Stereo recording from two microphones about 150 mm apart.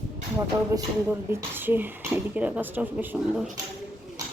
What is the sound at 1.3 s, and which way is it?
A woman's voice, 15° right (ahead or behind).